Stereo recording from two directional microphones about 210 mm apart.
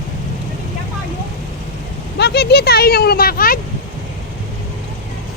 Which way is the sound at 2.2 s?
50° left (ahead or behind).